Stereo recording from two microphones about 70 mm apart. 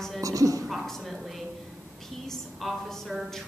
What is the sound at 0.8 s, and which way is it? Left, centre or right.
Speech, centre.